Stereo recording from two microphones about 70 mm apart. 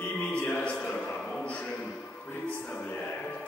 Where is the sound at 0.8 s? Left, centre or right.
Left.